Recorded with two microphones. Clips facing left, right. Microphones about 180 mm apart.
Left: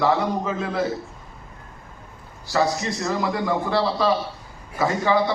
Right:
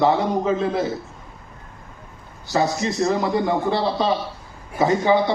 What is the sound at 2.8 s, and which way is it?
A man's voice, 25° right (ahead or behind).